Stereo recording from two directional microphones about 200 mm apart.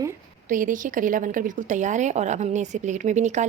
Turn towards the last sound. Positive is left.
turn(degrees=-35)  # may be behind; listen again after turning